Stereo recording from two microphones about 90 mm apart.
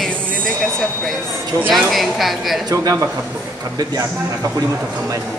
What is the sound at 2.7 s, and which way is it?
Speech, 40° right (ahead or behind).